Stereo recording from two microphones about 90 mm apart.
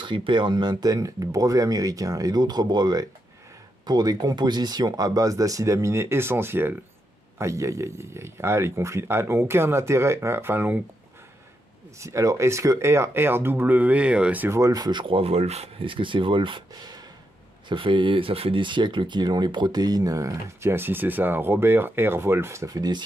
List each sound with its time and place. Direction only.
0.0 s speech: 65° right (ahead or behind); by 10.8 s 25° right (ahead or behind)
12.0 s speech: 35° right (ahead or behind); by 14.5 s 15° right (ahead or behind)
14.5 s speech: 40° right (ahead or behind)
14.9 s speech: 70° right (ahead or behind)
15.8 s speech: 70° right (ahead or behind); by 22.8 s 30° right (ahead or behind)
22.8 s speech: 50° right (ahead or behind)